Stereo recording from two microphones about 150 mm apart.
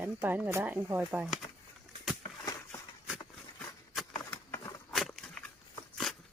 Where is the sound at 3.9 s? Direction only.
Centre (ahead or behind).